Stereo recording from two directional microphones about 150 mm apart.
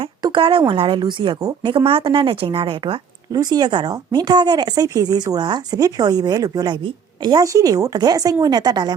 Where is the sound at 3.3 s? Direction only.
25° right (ahead or behind).